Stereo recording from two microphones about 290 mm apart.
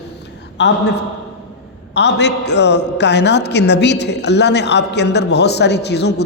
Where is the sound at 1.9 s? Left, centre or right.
Left.